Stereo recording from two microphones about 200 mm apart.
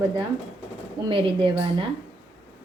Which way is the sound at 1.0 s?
25° right (ahead or behind).